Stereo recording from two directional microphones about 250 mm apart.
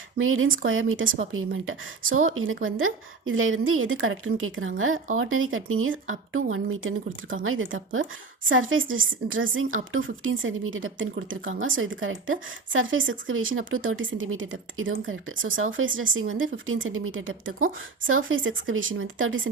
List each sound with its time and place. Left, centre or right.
0.2 s speech: right